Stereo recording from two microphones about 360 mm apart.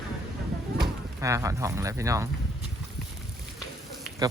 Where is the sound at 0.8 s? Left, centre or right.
Centre.